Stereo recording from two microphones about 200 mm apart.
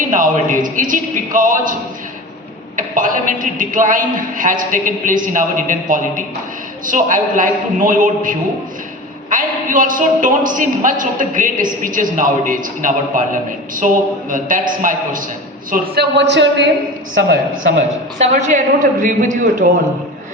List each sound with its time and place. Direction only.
0.1 s a man's voice: 40° right (ahead or behind)
2.7 s a man's voice: 40° right (ahead or behind)
15.7 s a man's voice: 55° right (ahead or behind)
17.2 s a woman's voice: 45° right (ahead or behind)